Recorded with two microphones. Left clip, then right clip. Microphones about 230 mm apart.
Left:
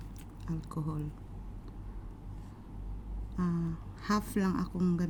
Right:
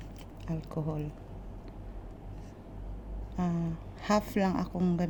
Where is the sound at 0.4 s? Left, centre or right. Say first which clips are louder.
Right 4 dB; right.